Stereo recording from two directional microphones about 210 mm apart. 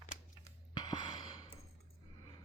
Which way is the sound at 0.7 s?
20° left (ahead or behind).